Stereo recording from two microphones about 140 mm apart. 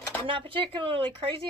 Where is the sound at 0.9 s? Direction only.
35° right (ahead or behind).